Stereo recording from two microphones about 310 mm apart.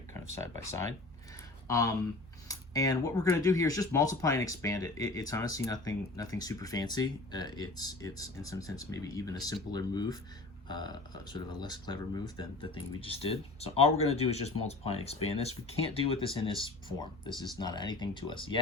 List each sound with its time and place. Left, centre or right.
0.1 s speech: centre